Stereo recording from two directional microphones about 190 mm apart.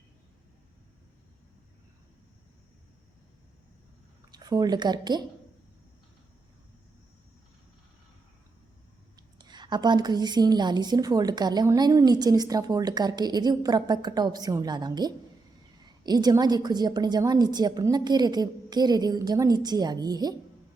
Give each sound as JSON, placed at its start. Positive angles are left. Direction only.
{"t": 4.3, "sound": "speech", "side_deg": -20}
{"t": 9.4, "sound": "a woman's voice", "side_deg": -25}